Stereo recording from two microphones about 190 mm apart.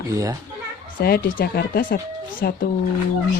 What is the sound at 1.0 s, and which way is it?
Speech, 55° left (ahead or behind).